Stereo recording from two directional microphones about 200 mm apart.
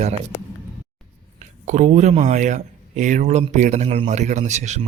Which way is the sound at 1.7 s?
35° right (ahead or behind).